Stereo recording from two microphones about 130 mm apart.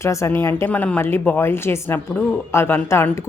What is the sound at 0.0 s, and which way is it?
A woman's voice, 20° left (ahead or behind).